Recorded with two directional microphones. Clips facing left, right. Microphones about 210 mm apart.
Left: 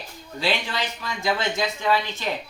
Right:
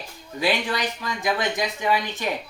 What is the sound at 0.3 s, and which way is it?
Speech, 15° right (ahead or behind).